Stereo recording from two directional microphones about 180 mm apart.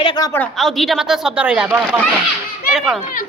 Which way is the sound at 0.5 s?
Centre (ahead or behind).